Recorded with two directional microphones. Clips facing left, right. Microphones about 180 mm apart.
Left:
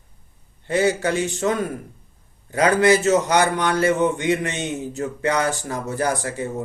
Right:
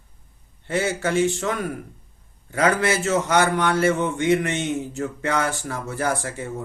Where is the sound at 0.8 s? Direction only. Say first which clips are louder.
Left 5 dB; 40° left (ahead or behind).